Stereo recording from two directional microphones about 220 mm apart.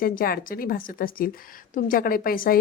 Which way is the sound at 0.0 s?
40° left (ahead or behind).